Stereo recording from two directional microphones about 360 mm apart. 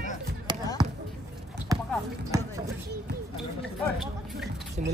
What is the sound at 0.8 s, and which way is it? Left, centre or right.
Basketball bounce, centre.